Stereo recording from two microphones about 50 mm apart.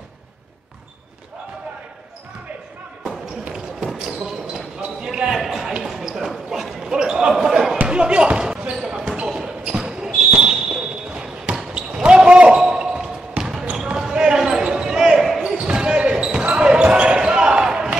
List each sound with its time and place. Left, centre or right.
3.4 s basketball bounce: centre
5.0 s basketball bounce: centre
5.4 s a sound: centre
5.9 s basketball bounce: centre
7.7 s basketball bounce: right; by 15.5 s centre
15.5 s a sound: centre